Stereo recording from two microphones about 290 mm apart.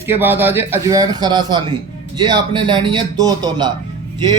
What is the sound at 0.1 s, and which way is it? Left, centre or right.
A man's voice, centre.